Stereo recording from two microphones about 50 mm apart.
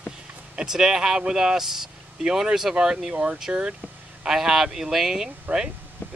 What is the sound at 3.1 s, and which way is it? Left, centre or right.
Speech, right.